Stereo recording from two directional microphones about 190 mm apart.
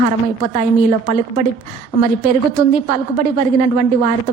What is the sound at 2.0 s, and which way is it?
A woman's voice, 45° right (ahead or behind).